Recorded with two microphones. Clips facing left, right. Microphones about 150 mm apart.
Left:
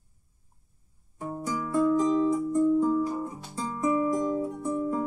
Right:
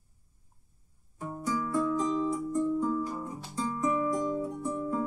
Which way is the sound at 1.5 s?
15° left (ahead or behind).